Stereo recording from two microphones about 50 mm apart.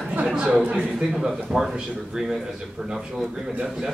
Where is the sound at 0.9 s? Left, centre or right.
Centre.